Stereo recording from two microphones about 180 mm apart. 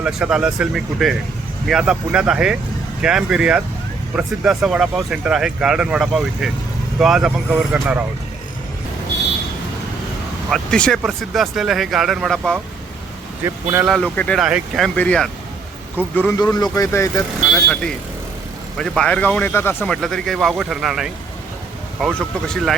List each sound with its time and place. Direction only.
0.0 s speech: 5° right (ahead or behind)
10.5 s speech: 5° left (ahead or behind)
13.4 s speech: 15° right (ahead or behind)
13.8 s speech: 5° left (ahead or behind)
16.4 s speech: 20° left (ahead or behind)
17.7 s speech: 5° left (ahead or behind)